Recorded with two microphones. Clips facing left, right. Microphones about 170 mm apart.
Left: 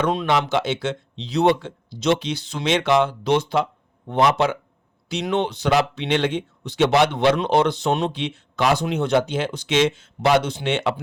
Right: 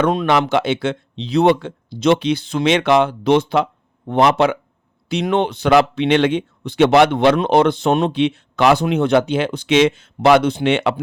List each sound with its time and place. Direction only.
0.0 s speech: 55° right (ahead or behind)